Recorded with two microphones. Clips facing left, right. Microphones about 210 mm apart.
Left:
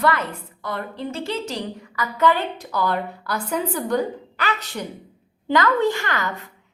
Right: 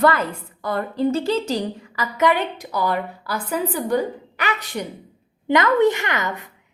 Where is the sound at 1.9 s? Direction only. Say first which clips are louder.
Right 1 dB; 20° right (ahead or behind).